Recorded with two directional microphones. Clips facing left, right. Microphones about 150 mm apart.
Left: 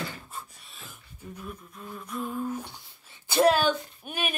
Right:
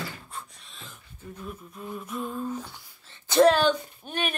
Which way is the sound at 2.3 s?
10° left (ahead or behind).